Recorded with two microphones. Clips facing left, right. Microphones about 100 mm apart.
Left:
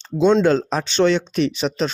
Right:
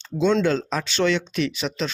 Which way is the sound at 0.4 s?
35° left (ahead or behind).